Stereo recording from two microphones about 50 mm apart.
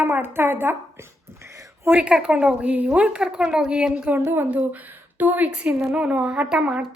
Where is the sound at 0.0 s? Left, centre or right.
Right.